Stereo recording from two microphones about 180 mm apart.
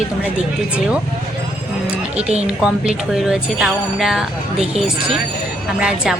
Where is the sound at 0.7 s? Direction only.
5° right (ahead or behind).